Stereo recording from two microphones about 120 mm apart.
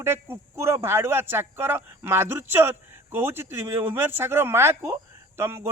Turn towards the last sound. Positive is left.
turn(degrees=-20)  # may be behind; listen again after turning